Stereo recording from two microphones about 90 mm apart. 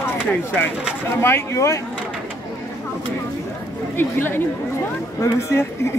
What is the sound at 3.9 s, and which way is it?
Speech, 25° left (ahead or behind).